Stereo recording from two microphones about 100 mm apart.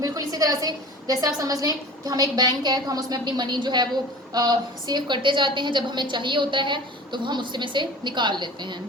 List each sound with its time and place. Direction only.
0.0 s a woman's voice: 35° right (ahead or behind)